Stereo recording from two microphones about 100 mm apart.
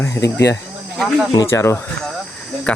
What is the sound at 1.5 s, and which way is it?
Speech, 25° left (ahead or behind).